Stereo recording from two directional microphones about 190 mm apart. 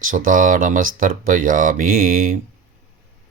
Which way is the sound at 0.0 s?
45° right (ahead or behind).